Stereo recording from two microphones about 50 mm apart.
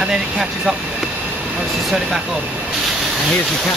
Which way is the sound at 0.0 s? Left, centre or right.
Centre.